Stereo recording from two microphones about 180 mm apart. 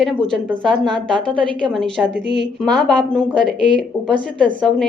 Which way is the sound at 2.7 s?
5° left (ahead or behind).